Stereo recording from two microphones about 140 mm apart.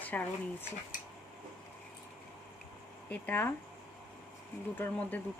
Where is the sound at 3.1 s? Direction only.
15° left (ahead or behind).